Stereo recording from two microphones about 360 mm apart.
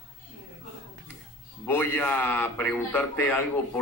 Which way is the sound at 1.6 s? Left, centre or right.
Centre.